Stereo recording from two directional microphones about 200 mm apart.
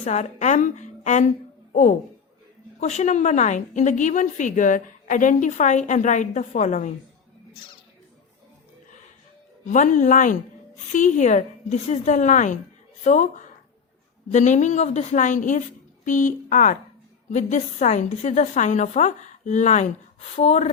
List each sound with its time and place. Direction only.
0.0 s a woman's voice: 35° left (ahead or behind)
9.6 s a woman's voice: 40° left (ahead or behind)